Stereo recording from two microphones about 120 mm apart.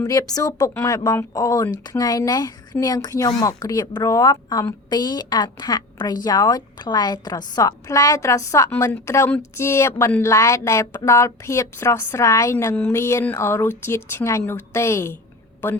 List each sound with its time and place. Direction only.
0.0 s a woman's voice: 30° left (ahead or behind)